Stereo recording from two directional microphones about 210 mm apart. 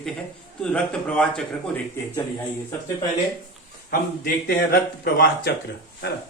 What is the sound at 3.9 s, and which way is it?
A man's voice, 45° left (ahead or behind).